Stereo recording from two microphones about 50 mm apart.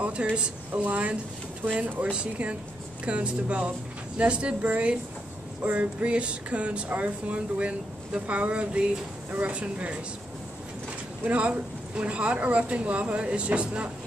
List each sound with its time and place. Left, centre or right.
0.0 s speech: right
11.2 s speech: right